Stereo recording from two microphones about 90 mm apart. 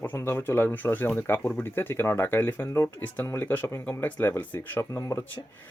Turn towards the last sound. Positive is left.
turn(degrees=30)  # may be behind; listen again after turning